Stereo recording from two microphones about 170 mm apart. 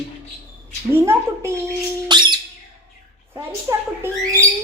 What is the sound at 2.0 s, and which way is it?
Squawk, 25° right (ahead or behind).